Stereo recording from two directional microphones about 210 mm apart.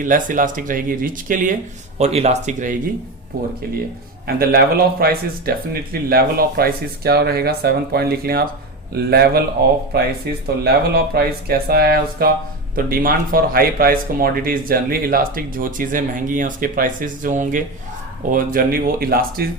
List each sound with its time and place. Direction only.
0.0 s speech: 40° right (ahead or behind)
3.3 s speech: 45° right (ahead or behind)